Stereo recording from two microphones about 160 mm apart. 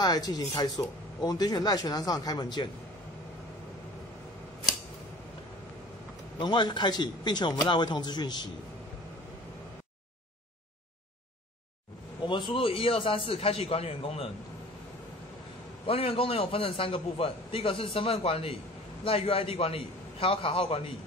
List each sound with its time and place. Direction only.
0.0 s a man's voice: 25° left (ahead or behind)
6.3 s a man's voice: 30° left (ahead or behind)
12.3 s a man's voice: 30° left (ahead or behind)
15.9 s a man's voice: 35° left (ahead or behind)